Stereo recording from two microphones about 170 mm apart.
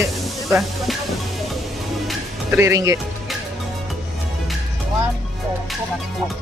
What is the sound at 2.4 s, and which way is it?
Speech, 15° right (ahead or behind).